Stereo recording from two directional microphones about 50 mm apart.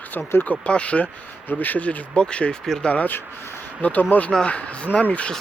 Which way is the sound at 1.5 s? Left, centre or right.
Left.